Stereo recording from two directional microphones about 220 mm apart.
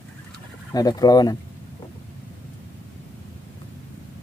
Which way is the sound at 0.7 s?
15° left (ahead or behind).